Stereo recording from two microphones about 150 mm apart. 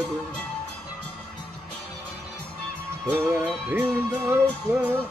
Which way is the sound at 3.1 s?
15° right (ahead or behind).